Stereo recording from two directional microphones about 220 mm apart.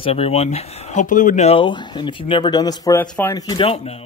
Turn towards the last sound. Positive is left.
turn(degrees=25)  # may be behind; listen again after turning